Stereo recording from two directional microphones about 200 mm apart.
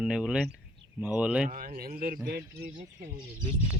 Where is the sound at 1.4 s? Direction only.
45° right (ahead or behind).